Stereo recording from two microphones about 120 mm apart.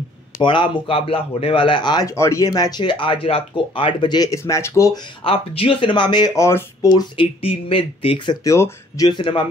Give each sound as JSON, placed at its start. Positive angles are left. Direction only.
{"t": 0.4, "sound": "speech", "side_deg": 40}
{"t": 2.0, "sound": "speech", "side_deg": 25}
{"t": 5.2, "sound": "speech", "side_deg": 50}
{"t": 6.3, "sound": "speech", "side_deg": 25}
{"t": 6.9, "sound": "speech", "side_deg": 35}
{"t": 7.4, "sound": "speech", "side_deg": 50}
{"t": 8.5, "sound": "speech", "side_deg": 25}
{"t": 9.2, "sound": "speech", "side_deg": 45}